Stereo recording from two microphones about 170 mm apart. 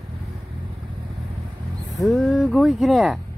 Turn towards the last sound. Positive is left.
turn(degrees=0)  # may be behind; listen again after turning